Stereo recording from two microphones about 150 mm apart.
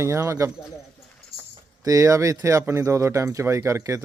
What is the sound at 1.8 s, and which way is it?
A man's voice, 20° right (ahead or behind).